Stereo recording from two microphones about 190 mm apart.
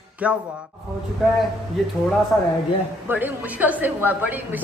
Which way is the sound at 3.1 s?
10° right (ahead or behind).